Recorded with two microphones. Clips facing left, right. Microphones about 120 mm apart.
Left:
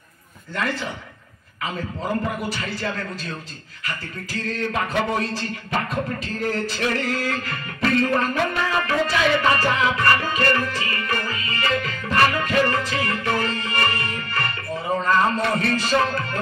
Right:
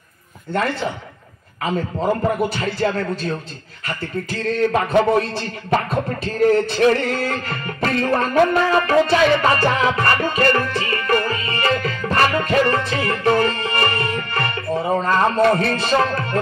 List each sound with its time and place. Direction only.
0.5 s music: 30° right (ahead or behind)